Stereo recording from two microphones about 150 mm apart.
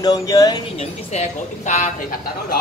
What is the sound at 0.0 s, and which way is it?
Speech, 25° left (ahead or behind).